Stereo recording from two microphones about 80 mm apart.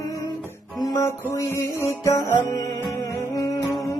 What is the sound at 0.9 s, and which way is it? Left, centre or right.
Music, left.